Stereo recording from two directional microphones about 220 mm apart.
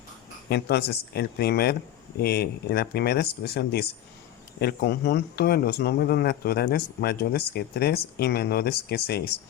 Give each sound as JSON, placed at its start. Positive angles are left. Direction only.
{"t": 0.5, "sound": "speech", "side_deg": 45}